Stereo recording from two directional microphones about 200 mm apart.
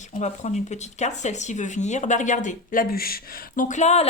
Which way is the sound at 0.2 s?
35° left (ahead or behind).